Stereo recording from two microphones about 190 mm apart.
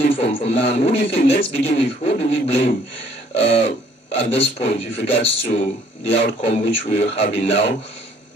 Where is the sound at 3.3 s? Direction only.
30° left (ahead or behind).